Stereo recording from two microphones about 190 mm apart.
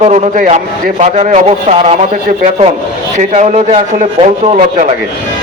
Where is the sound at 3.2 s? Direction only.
35° right (ahead or behind).